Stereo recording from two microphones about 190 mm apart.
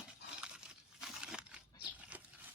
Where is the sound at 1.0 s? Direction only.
5° right (ahead or behind).